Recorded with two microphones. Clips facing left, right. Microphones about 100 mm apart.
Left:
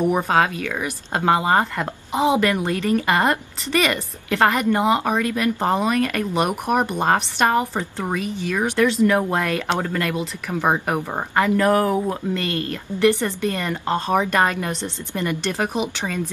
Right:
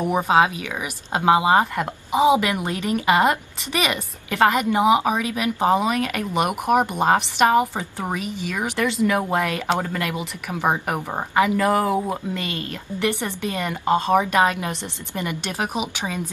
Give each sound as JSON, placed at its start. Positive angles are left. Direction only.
{"t": 0.2, "sound": "speech", "side_deg": -10}